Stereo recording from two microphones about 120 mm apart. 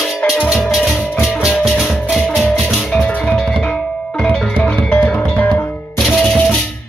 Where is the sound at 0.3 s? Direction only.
5° right (ahead or behind).